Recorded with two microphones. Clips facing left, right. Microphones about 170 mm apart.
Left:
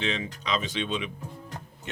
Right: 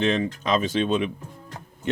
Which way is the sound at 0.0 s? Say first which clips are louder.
Right 8 dB; 50° right (ahead or behind).